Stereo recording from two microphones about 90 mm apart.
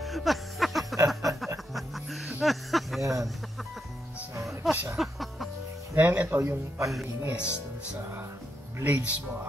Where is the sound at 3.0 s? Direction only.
35° right (ahead or behind).